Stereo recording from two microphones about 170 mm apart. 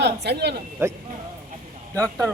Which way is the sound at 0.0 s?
80° right.